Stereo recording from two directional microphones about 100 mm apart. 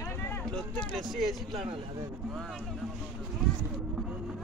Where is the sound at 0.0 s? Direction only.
25° left (ahead or behind).